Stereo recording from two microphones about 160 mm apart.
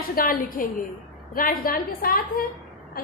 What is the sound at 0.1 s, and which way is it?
A woman's voice, 60° left (ahead or behind).